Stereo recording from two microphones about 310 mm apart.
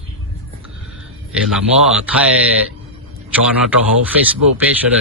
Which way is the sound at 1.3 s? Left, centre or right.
Centre.